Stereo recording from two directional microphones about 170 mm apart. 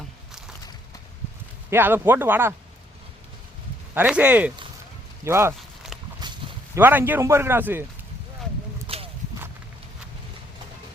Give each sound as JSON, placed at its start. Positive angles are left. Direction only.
{"t": 1.7, "sound": "a man's voice", "side_deg": -10}
{"t": 3.9, "sound": "a man's voice", "side_deg": -10}
{"t": 6.2, "sound": "a sound", "side_deg": -25}
{"t": 6.7, "sound": "a man's voice", "side_deg": -10}
{"t": 8.9, "sound": "clip-clop", "side_deg": -30}